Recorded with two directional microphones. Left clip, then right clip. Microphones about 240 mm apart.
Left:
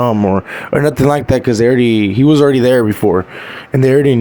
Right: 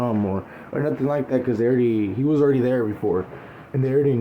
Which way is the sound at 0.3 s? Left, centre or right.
Left.